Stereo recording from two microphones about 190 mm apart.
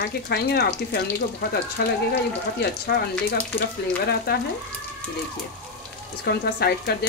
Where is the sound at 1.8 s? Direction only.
55° left (ahead or behind).